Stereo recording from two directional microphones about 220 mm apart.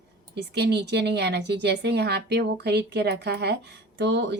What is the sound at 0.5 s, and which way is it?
A woman's voice, 50° right (ahead or behind).